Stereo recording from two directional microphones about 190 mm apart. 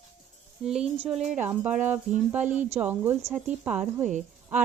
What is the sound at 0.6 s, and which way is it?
Speech, centre (ahead or behind).